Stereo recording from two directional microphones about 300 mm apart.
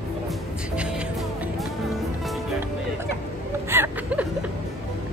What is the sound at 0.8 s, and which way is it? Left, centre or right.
Music, centre.